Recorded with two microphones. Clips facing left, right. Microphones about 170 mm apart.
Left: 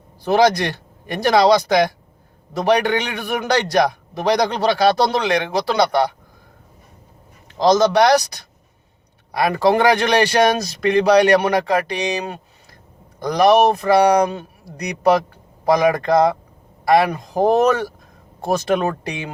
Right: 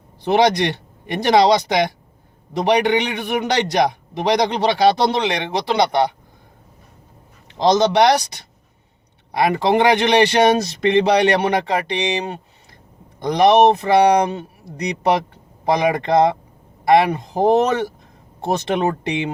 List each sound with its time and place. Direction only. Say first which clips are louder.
0.2 s a man's voice: even; 20° right (ahead or behind)
7.6 s a man's voice: even; 20° right (ahead or behind)